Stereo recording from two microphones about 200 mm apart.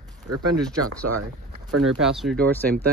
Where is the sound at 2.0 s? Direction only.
Centre (ahead or behind).